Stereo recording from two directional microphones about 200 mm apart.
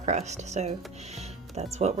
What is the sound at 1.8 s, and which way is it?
Speech, 35° right (ahead or behind).